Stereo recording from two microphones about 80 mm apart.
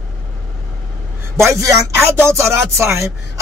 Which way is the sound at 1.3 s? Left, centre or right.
Right.